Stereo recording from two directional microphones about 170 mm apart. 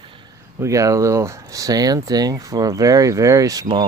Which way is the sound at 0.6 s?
20° right (ahead or behind).